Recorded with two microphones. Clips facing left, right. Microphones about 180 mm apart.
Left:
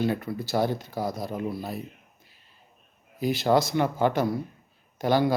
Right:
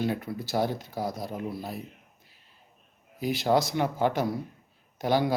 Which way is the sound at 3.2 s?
10° right (ahead or behind).